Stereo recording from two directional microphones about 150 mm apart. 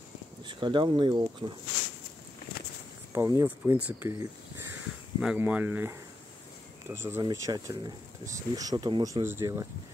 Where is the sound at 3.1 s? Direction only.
20° right (ahead or behind).